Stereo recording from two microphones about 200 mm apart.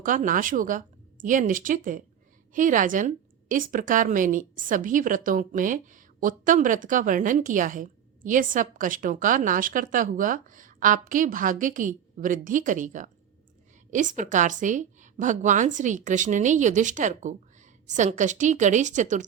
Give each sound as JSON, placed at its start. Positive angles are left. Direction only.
{"t": 0.0, "sound": "a woman's voice", "side_deg": -40}